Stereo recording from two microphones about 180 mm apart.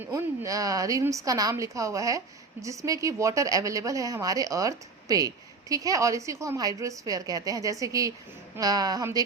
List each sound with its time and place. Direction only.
0.0 s a woman's voice: 20° right (ahead or behind)